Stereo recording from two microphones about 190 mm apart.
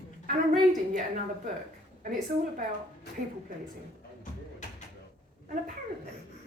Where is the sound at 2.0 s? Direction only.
45° right (ahead or behind).